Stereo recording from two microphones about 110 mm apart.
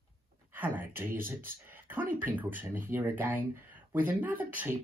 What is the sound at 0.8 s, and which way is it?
Speech, 20° right (ahead or behind).